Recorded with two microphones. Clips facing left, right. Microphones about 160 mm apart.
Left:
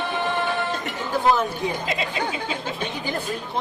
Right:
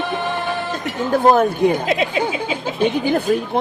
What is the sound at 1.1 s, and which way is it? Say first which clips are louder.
Speech: right 7 dB; 55° right (ahead or behind).